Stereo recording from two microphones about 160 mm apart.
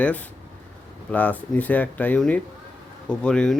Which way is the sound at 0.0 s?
10° left (ahead or behind).